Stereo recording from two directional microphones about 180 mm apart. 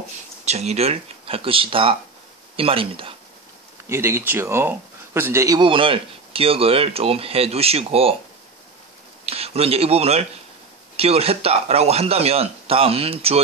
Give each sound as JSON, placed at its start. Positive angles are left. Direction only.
{"t": 0.5, "sound": "speech", "side_deg": -35}
{"t": 3.9, "sound": "speech", "side_deg": -15}
{"t": 9.2, "sound": "speech", "side_deg": -35}